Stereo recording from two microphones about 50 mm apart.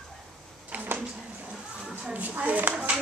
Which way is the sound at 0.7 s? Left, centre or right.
Right.